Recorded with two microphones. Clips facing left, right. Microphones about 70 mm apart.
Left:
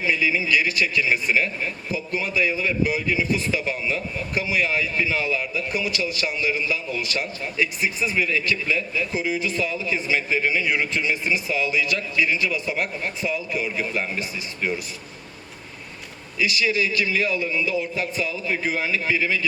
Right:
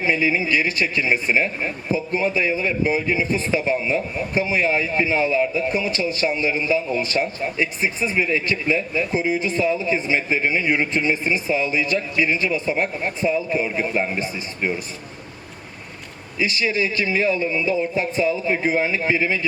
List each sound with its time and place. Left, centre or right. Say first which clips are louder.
0.0 s speech: right 2 dB; right
16.4 s speech: right 1 dB; right